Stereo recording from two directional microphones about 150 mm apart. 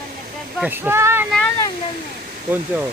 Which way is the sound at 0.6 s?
15° right (ahead or behind).